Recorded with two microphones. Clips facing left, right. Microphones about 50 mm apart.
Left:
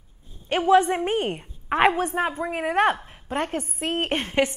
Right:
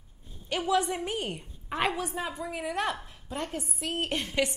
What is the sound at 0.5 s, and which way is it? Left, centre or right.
A woman's voice, left.